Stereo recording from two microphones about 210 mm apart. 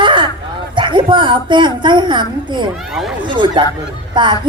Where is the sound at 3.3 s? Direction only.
20° right (ahead or behind).